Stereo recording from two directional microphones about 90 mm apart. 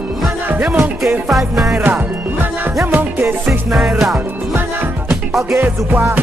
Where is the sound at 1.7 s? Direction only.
20° right (ahead or behind).